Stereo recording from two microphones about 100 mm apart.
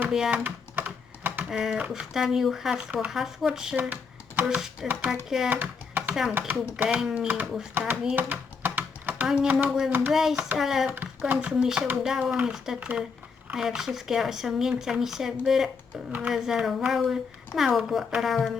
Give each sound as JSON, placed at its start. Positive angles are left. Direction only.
{"t": 0.1, "sound": "speech", "side_deg": -5}
{"t": 0.4, "sound": "typing", "side_deg": -20}
{"t": 1.5, "sound": "speech", "side_deg": -5}
{"t": 5.5, "sound": "typing", "side_deg": -15}
{"t": 6.5, "sound": "speech", "side_deg": -20}
{"t": 6.8, "sound": "speech", "side_deg": -5}
{"t": 8.1, "sound": "typing", "side_deg": -20}
{"t": 9.2, "sound": "speech", "side_deg": -10}
{"t": 10.9, "sound": "speech", "side_deg": -20}